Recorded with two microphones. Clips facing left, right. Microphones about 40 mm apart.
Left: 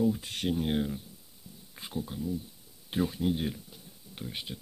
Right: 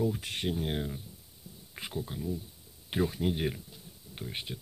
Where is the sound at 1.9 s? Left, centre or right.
Centre.